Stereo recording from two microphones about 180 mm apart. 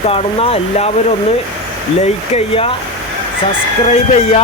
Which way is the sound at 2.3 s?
30° left (ahead or behind).